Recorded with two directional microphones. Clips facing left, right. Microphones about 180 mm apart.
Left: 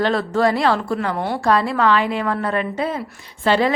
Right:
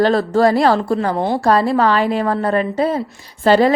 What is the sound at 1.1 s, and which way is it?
A woman's voice, 25° right (ahead or behind).